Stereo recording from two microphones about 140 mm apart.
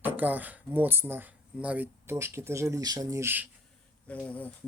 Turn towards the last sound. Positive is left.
turn(degrees=10)  # may be behind; listen again after turning